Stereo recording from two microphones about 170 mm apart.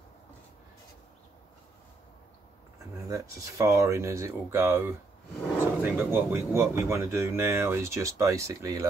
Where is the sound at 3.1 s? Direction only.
20° right (ahead or behind).